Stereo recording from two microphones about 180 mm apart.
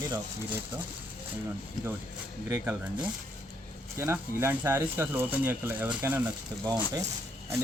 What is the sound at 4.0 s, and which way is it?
Speech, 15° right (ahead or behind).